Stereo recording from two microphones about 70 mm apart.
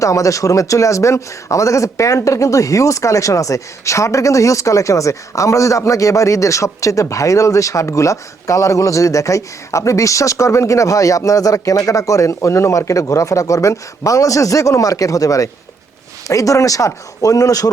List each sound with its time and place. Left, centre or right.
0.0 s speech: left